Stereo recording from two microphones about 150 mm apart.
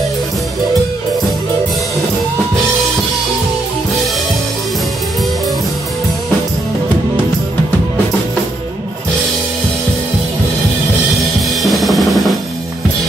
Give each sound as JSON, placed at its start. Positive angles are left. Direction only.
{"t": 11.1, "sound": "drum kit", "side_deg": 0}